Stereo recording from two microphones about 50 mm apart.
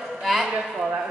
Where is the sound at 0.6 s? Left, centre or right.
Centre.